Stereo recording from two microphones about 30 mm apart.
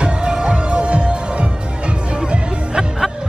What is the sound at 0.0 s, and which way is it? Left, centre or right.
Music, right.